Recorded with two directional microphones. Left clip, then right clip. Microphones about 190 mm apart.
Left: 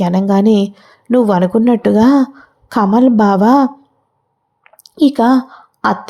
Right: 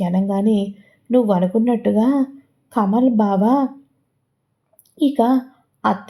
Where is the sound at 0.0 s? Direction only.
30° left (ahead or behind).